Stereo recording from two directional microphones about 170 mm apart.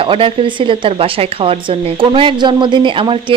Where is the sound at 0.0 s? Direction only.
30° right (ahead or behind).